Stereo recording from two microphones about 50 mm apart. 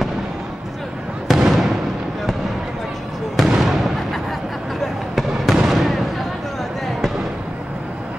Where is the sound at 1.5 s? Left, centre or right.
Centre.